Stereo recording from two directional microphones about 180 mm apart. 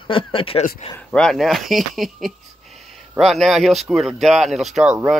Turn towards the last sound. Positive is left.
turn(degrees=0)  # may be behind; listen again after turning